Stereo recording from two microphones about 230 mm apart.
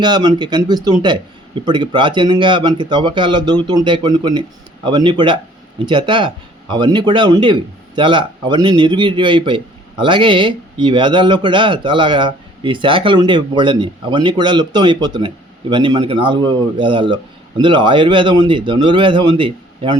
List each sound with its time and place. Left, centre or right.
0.0 s speech: centre